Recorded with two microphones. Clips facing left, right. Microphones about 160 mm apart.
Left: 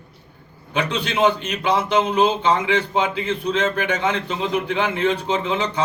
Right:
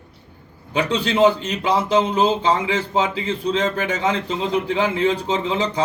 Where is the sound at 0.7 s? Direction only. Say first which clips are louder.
Right 3 dB; 30° right (ahead or behind).